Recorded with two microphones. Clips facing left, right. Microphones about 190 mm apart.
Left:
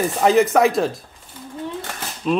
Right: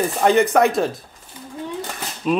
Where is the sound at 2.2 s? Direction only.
5° right (ahead or behind).